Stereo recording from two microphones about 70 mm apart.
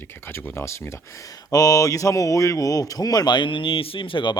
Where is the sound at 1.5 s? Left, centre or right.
Left.